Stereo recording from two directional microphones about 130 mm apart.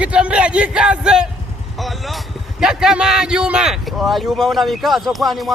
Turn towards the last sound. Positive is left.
turn(degrees=0)  # may be behind; listen again after turning